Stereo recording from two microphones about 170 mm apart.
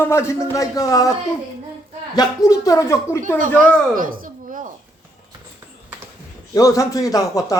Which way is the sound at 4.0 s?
55° right (ahead or behind).